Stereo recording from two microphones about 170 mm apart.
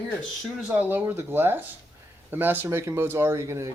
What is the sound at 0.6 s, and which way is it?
Speech, 10° right (ahead or behind).